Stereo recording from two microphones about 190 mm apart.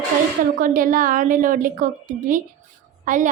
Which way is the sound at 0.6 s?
45° right (ahead or behind).